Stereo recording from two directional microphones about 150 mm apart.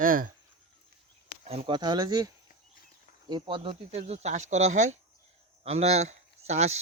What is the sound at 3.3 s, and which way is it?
Speech, 35° right (ahead or behind).